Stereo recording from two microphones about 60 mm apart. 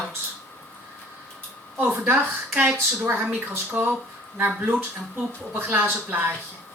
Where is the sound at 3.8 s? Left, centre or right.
Right.